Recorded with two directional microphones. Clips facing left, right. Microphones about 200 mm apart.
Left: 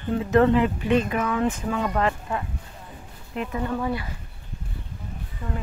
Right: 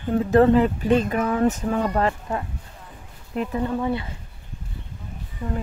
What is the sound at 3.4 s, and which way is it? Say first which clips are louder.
Speech: right 3 dB; 30° right (ahead or behind).